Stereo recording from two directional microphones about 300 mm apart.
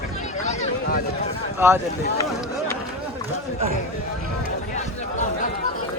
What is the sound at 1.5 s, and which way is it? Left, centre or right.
Speech, centre.